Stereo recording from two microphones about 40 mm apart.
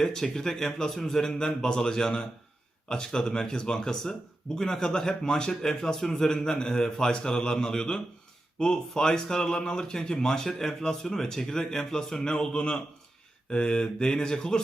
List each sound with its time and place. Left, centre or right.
0.0 s speech: centre
13.5 s mantra: left